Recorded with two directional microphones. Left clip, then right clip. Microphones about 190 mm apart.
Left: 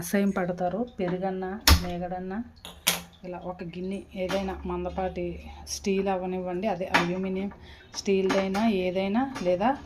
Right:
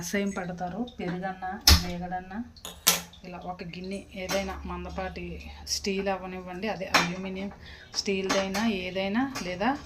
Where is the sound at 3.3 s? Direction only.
45° left (ahead or behind).